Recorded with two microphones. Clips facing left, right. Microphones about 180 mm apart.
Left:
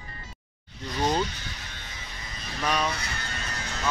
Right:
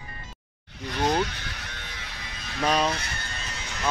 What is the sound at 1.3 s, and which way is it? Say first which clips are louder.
Electric shaver: right 2 dB; 70° right (ahead or behind).